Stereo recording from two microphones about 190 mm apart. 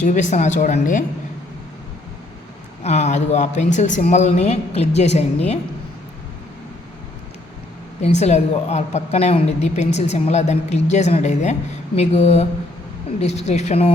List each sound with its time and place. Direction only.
0.0 s a woman's voice: 40° left (ahead or behind)
2.8 s a woman's voice: 35° left (ahead or behind)
8.0 s a woman's voice: 35° left (ahead or behind)